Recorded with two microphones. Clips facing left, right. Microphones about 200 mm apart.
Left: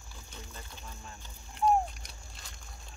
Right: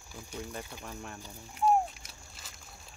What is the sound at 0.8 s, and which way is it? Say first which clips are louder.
Speech: right 6 dB; 65° right (ahead or behind).